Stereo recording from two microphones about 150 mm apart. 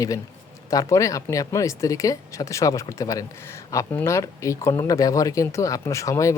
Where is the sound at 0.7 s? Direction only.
20° left (ahead or behind).